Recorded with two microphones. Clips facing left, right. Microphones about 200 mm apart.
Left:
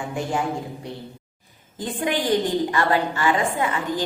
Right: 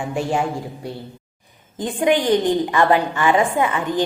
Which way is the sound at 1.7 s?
20° right (ahead or behind).